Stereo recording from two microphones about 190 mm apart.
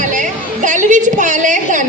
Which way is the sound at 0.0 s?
40° right (ahead or behind).